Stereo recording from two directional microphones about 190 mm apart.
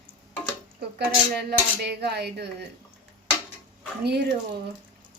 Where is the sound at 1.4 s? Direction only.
60° right (ahead or behind).